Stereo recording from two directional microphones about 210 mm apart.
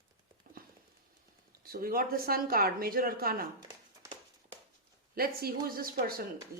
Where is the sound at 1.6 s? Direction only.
45° right (ahead or behind).